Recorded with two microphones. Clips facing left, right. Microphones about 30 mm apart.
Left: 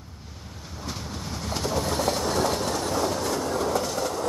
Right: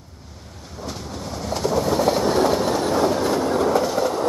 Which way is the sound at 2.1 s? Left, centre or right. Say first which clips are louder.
Right 6 dB; right.